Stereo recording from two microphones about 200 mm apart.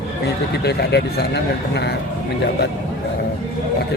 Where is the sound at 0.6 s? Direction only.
55° left (ahead or behind).